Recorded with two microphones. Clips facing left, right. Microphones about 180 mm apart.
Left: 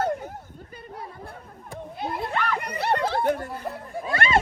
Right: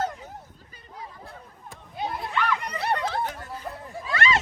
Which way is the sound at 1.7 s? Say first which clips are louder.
Left 1 dB; 60° left (ahead or behind).